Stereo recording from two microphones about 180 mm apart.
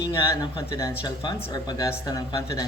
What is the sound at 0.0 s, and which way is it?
Speech, 20° left (ahead or behind).